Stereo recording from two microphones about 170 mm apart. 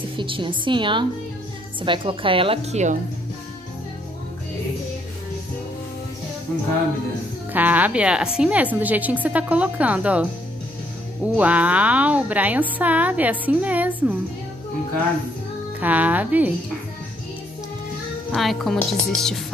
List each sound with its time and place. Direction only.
0.2 s a woman's voice: 30° right (ahead or behind)
7.5 s a woman's voice: 10° right (ahead or behind)
11.3 s a woman's voice: 10° right (ahead or behind)
15.8 s a woman's voice: 10° right (ahead or behind)
18.3 s speech: centre (ahead or behind)